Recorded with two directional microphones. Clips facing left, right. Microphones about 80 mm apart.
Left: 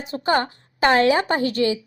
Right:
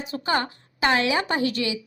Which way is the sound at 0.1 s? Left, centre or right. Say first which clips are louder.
Left 5 dB; left.